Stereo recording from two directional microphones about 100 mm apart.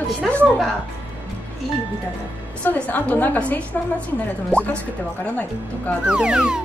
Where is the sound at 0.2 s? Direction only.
Centre (ahead or behind).